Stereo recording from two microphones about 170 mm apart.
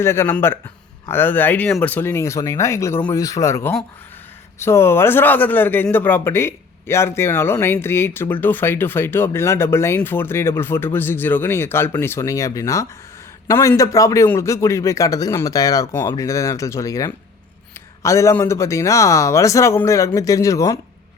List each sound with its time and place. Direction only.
0.0 s a man's voice: 15° left (ahead or behind)